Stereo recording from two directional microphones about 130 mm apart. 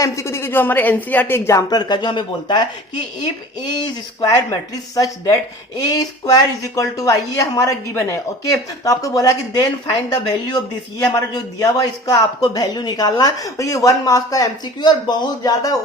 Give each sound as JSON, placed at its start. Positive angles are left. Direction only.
{"t": 0.0, "sound": "speech", "side_deg": 20}
{"t": 3.8, "sound": "speech", "side_deg": 30}